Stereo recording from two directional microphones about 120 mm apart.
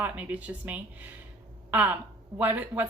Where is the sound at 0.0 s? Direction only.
10° right (ahead or behind).